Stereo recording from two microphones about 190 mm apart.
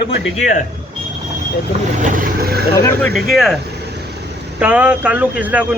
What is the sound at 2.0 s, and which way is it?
Vehicle, 45° right (ahead or behind).